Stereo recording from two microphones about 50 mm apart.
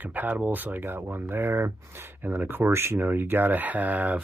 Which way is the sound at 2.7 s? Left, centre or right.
Right.